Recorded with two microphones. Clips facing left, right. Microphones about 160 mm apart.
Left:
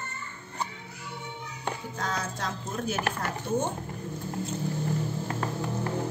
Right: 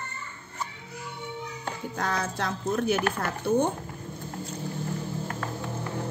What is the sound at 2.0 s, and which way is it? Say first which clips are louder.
Speech: right 4 dB; 60° right (ahead or behind).